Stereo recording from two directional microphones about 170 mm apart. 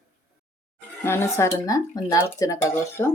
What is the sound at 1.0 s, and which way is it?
Speech, 15° left (ahead or behind).